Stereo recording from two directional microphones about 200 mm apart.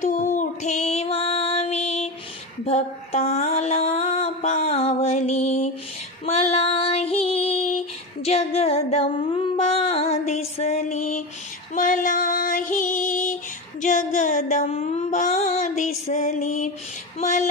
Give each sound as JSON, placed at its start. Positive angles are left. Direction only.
{"t": 0.0, "sound": "female singing", "side_deg": 40}
{"t": 2.6, "sound": "music", "side_deg": 30}
{"t": 6.2, "sound": "female singing", "side_deg": 30}
{"t": 17.2, "sound": "a sound", "side_deg": 35}